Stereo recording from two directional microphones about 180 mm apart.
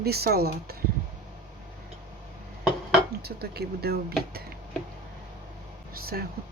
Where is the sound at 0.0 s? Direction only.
60° right (ahead or behind).